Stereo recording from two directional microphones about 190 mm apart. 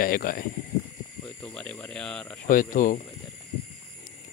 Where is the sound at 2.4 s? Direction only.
45° left (ahead or behind).